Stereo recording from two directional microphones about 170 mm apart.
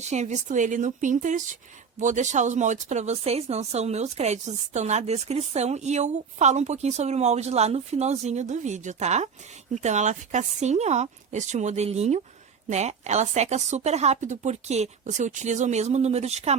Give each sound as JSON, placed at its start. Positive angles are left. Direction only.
{"t": 0.0, "sound": "speech", "side_deg": -40}